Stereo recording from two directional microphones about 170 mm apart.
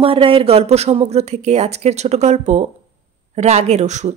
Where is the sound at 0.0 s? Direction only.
30° right (ahead or behind).